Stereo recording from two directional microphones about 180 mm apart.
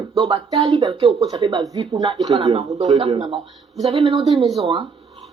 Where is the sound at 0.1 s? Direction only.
30° right (ahead or behind).